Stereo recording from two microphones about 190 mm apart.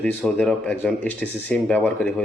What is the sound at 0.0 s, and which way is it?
Speech, 5° left (ahead or behind).